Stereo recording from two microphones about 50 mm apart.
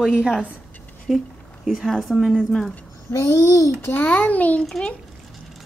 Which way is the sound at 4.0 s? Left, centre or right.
Left.